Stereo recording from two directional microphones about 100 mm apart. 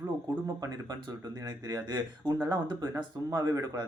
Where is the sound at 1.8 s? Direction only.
45° right (ahead or behind).